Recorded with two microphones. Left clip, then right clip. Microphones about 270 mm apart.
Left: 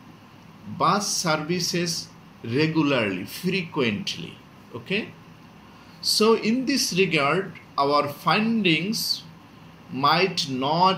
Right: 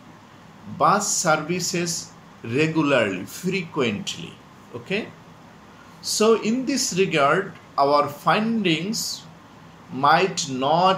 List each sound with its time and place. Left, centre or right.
0.7 s speech: right
5.9 s speech: right